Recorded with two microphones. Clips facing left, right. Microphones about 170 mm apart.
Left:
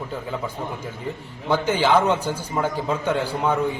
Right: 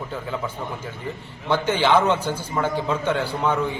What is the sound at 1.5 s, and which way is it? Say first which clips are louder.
A man's voice: even; 10° left (ahead or behind).